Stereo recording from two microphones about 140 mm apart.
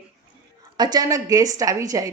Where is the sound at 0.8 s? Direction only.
30° right (ahead or behind).